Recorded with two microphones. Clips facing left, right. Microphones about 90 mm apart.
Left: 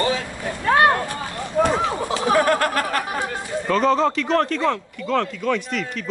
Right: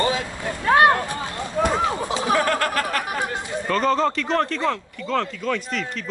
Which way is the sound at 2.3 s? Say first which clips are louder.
Left 3 dB; 20° left (ahead or behind).